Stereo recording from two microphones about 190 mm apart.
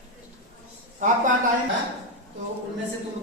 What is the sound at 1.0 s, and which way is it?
Speech, 40° right (ahead or behind).